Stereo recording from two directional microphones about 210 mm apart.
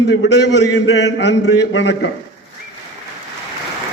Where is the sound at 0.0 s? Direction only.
55° left (ahead or behind).